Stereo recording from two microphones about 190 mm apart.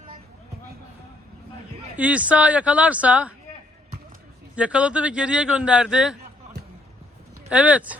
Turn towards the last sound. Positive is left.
turn(degrees=-5)  # may be behind; listen again after turning